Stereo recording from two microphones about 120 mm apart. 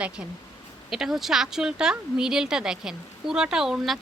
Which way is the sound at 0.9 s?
5° right (ahead or behind).